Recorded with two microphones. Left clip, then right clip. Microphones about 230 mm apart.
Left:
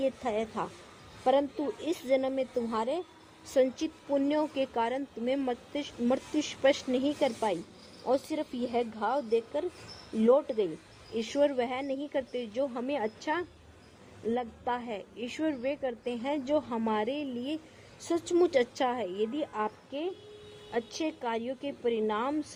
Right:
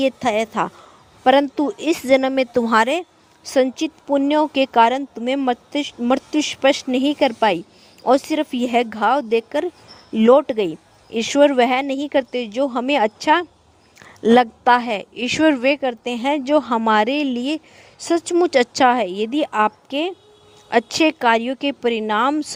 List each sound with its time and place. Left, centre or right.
0.0 s a woman's voice: right